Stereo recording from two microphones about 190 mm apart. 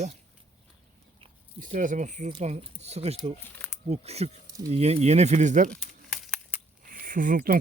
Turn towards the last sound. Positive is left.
turn(degrees=-50)  # may be behind; listen again after turning